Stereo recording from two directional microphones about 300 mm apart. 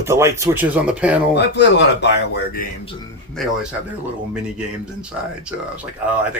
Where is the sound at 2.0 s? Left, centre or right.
Left.